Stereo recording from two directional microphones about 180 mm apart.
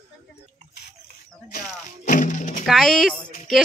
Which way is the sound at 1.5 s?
45° left (ahead or behind).